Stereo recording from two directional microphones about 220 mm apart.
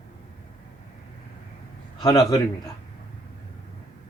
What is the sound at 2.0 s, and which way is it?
Speech, 15° left (ahead or behind).